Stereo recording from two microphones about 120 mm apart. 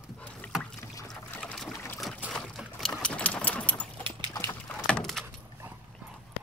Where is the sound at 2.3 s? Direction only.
5° left (ahead or behind).